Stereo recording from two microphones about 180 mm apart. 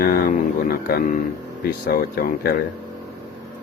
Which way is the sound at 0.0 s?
55° left (ahead or behind).